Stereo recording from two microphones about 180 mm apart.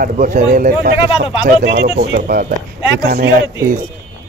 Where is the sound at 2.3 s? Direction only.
50° right (ahead or behind).